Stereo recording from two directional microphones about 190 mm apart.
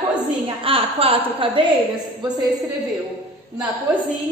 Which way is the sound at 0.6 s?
30° right (ahead or behind).